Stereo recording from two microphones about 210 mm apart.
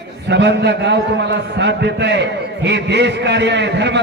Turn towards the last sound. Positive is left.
turn(degrees=-55)  # may be behind; listen again after turning